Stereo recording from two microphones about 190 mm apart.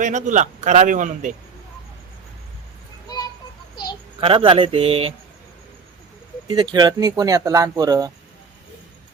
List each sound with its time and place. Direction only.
0.0 s a man's voice: 40° right (ahead or behind)
4.2 s speech: 30° right (ahead or behind)
6.5 s speech: 25° right (ahead or behind)